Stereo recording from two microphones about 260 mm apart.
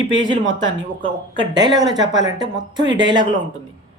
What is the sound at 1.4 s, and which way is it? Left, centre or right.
Speech, centre.